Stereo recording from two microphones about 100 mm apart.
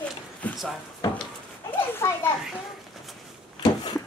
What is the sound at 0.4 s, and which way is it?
Music, 15° left (ahead or behind).